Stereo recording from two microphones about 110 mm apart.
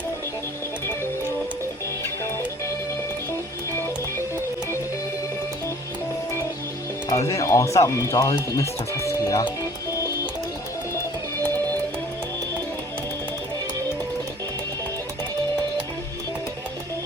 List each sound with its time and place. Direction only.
7.1 s speech: 30° left (ahead or behind)